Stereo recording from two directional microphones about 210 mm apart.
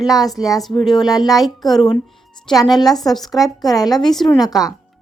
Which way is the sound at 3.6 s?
20° left (ahead or behind).